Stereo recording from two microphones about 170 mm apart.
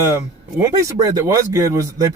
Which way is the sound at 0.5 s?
20° right (ahead or behind).